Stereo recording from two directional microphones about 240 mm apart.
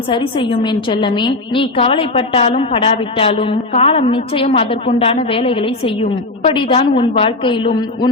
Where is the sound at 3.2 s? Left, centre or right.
Left.